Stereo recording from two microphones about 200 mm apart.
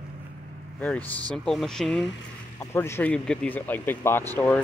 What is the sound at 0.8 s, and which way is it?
Speech, 5° left (ahead or behind).